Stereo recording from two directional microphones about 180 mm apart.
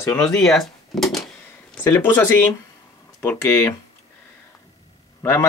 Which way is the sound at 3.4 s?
15° left (ahead or behind).